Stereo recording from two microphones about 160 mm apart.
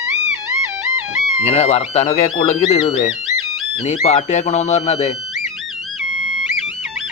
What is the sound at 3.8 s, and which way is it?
Speech, 45° left (ahead or behind).